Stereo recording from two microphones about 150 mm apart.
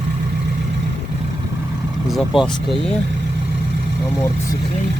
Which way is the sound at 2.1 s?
Centre (ahead or behind).